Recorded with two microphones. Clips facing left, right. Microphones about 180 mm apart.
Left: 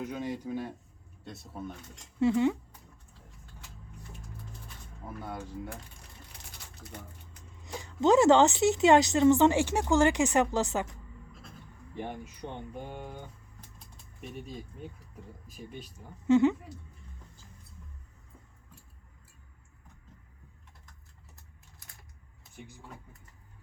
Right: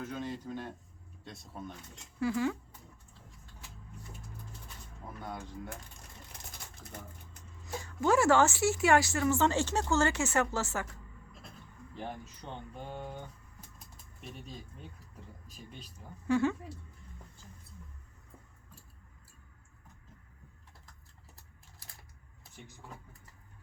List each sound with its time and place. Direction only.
0.0 s a woman's voice: 15° left (ahead or behind)
2.2 s speech: 20° left (ahead or behind)
7.6 s a woman's voice: 20° left (ahead or behind)
11.9 s a woman's voice: 10° left (ahead or behind)
16.2 s speech: 20° left (ahead or behind)